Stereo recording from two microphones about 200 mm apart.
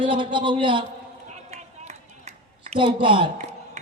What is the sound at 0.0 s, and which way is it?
Speech, 25° right (ahead or behind).